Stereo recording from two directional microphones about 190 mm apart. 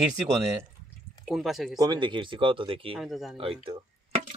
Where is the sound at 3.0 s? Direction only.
Centre (ahead or behind).